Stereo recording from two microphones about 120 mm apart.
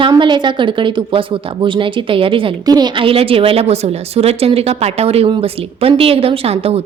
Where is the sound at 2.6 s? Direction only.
35° right (ahead or behind).